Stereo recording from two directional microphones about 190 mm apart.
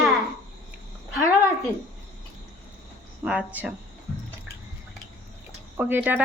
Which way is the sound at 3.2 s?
5° right (ahead or behind).